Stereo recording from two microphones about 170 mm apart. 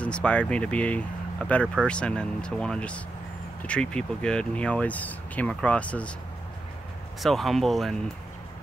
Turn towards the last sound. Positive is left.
turn(degrees=0)  # may be behind; listen again after turning